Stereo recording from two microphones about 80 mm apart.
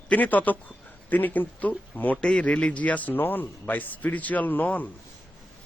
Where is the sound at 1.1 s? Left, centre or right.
Left.